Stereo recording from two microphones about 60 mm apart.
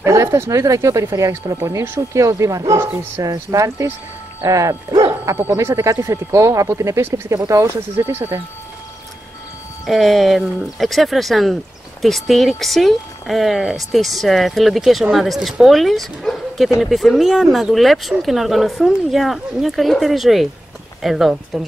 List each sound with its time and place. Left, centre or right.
0.0 s speech: right
9.8 s speech: centre